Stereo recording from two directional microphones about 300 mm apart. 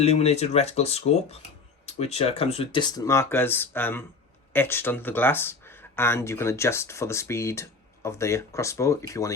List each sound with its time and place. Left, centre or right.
0.0 s speech: left